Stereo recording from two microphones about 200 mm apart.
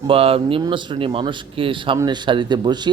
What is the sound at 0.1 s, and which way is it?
Speech, 30° right (ahead or behind).